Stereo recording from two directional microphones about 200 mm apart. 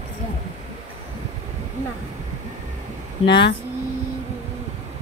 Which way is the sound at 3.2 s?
60° left (ahead or behind).